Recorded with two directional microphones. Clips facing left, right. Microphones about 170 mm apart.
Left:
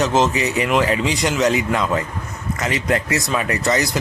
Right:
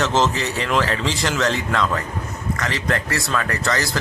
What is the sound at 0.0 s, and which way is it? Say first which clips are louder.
Speech: left 2 dB; centre (ahead or behind).